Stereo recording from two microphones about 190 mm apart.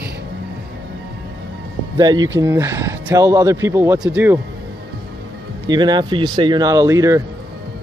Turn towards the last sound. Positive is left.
turn(degrees=-15)  # may be behind; listen again after turning